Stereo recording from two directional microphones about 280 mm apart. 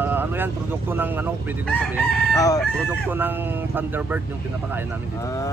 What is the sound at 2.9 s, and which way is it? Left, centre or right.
Speech, centre.